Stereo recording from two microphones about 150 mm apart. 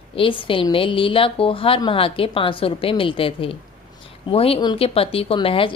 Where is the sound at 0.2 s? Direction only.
35° left (ahead or behind).